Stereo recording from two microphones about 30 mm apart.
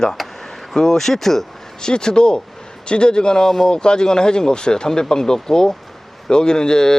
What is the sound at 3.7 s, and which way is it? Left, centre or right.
Speech, left.